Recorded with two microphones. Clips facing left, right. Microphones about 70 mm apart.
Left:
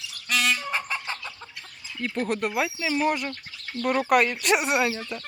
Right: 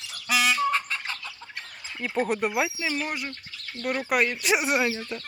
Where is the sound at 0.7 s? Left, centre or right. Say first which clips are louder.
Right 2 dB; centre.